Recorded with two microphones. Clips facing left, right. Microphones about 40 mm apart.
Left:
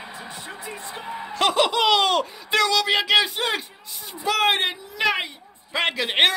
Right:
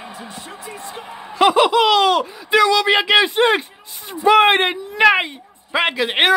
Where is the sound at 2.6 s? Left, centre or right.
Right.